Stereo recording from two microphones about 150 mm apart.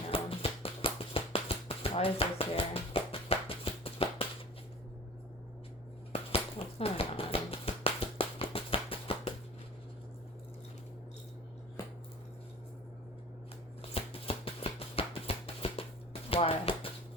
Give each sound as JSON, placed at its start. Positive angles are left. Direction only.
{"t": 0.1, "sound": "music", "side_deg": 40}
{"t": 6.1, "sound": "finger snapping", "side_deg": 40}
{"t": 13.9, "sound": "music", "side_deg": 40}
{"t": 16.3, "sound": "a sound", "side_deg": 40}